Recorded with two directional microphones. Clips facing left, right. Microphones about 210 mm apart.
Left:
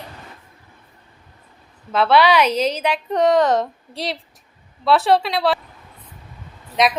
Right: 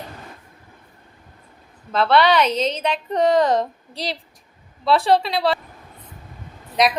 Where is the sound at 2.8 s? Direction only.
Centre (ahead or behind).